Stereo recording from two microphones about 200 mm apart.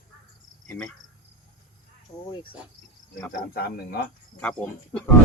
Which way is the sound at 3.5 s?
50° left (ahead or behind).